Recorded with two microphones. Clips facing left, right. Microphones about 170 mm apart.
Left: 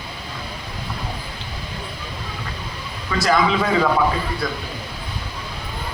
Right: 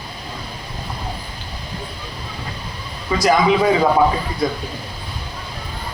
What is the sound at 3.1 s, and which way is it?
Speech, 20° right (ahead or behind).